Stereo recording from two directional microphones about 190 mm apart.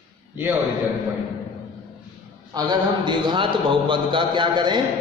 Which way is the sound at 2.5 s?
25° right (ahead or behind).